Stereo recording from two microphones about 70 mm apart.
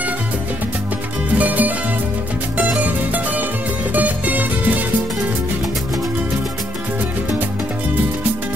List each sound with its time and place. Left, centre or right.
1.4 s music: right
2.8 s music: right